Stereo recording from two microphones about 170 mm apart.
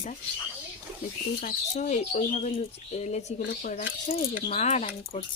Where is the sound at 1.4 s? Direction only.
45° left (ahead or behind).